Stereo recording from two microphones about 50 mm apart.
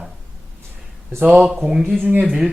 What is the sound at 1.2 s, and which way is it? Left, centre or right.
Speech, right.